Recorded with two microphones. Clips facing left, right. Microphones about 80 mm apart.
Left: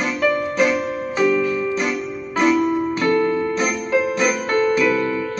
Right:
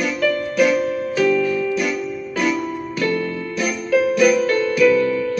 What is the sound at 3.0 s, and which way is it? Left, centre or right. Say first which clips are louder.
Music: left 2 dB; left.